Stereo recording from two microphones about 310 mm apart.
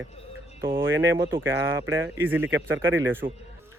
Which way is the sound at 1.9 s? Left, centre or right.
Right.